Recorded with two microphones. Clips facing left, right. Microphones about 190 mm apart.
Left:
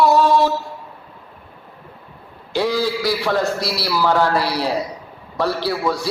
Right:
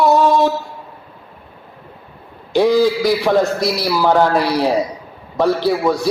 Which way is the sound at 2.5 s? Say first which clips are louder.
Right 7 dB; 15° right (ahead or behind).